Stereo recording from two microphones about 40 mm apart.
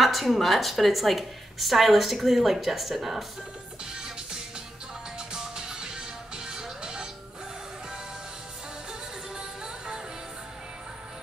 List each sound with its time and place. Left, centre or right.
0.0 s a woman's voice: centre
5.3 s music: centre
9.4 s music: centre